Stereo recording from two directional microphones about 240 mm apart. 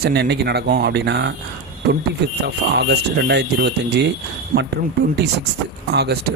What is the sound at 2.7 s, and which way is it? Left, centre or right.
Speech, right.